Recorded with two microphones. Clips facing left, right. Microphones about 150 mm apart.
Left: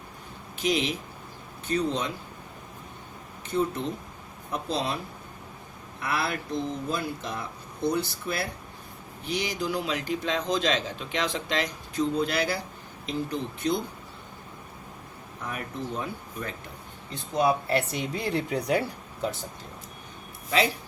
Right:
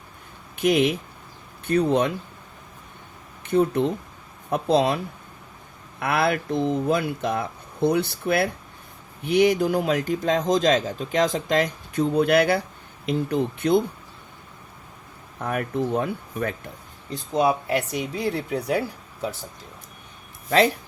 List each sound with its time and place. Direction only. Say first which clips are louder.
0.5 s speech: right 7 dB; 55° right (ahead or behind)
3.4 s speech: right 7 dB; 60° right (ahead or behind)
6.0 s a man's voice: right 7 dB; 60° right (ahead or behind)
15.4 s speech: right 9 dB; 60° right (ahead or behind)
17.7 s speech: right 2 dB; 10° right (ahead or behind)